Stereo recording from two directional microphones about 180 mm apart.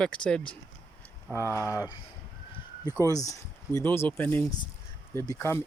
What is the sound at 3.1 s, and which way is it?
Speech, 20° left (ahead or behind).